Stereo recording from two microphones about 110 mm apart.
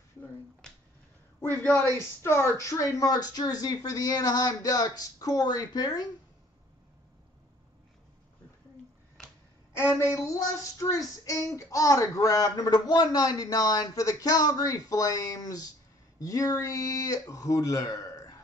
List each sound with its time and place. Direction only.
2.0 s speech: 25° left (ahead or behind)
9.9 s speech: 25° left (ahead or behind)